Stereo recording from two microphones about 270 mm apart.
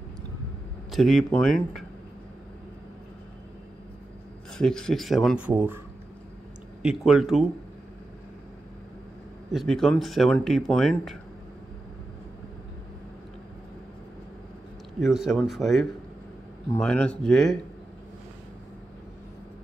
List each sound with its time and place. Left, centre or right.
0.9 s speech: centre
4.6 s speech: centre
6.8 s speech: centre
9.5 s speech: centre
15.0 s speech: centre